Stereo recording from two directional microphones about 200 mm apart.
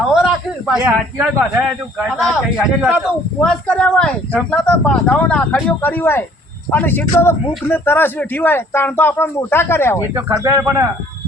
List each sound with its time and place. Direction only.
0.1 s a sound: 5° right (ahead or behind)
0.8 s a man's voice: 10° right (ahead or behind); by 10.0 s 10° left (ahead or behind)
10.2 s speech: 15° right (ahead or behind)